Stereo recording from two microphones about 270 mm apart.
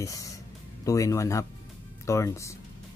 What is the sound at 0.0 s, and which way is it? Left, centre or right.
Speech, centre.